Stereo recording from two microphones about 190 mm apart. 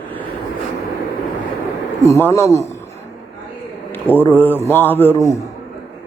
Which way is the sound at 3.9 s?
10° left (ahead or behind).